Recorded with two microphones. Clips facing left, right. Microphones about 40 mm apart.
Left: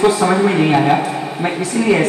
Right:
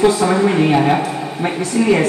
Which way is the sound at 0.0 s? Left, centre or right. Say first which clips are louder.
Even; centre.